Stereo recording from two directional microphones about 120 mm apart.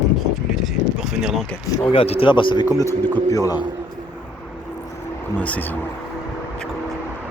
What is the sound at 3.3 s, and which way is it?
Speech, 25° left (ahead or behind).